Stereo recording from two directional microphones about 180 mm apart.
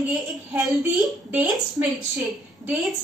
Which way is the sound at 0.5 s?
5° right (ahead or behind).